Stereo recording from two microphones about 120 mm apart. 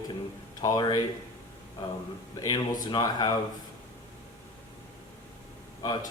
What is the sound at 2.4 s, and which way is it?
Speech, 35° left (ahead or behind).